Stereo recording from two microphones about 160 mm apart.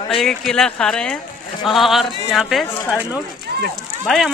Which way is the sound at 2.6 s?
15° left (ahead or behind).